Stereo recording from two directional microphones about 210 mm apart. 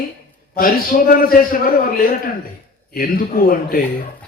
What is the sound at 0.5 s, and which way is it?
Speech, 45° left (ahead or behind).